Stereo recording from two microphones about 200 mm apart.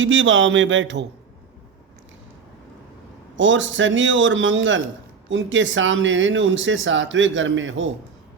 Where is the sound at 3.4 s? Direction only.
70° right (ahead or behind).